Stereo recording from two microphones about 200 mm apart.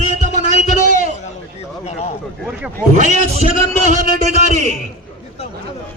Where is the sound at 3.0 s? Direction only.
35° right (ahead or behind).